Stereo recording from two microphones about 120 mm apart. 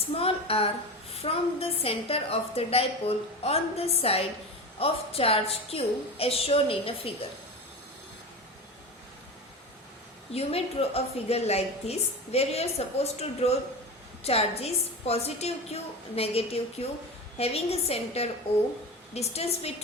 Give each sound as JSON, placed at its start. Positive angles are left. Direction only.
{"t": 0.0, "sound": "a woman's voice", "side_deg": 55}
{"t": 10.3, "sound": "a woman's voice", "side_deg": 55}